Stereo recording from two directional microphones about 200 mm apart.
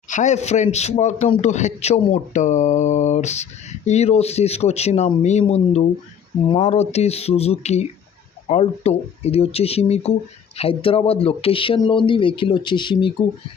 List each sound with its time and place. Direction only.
0.1 s a man's voice: 35° left (ahead or behind)